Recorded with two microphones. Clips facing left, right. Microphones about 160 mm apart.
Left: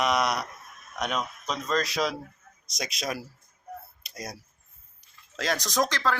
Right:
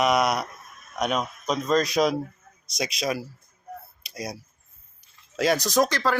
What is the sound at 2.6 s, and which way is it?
Speech, centre (ahead or behind).